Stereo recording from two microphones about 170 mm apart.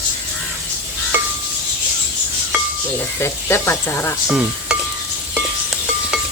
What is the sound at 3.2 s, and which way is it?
Speech, 15° left (ahead or behind).